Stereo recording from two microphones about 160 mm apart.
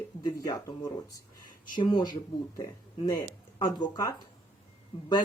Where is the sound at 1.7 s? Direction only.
30° left (ahead or behind).